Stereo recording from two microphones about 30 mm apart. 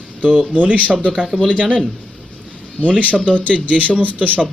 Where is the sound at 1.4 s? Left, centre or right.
Right.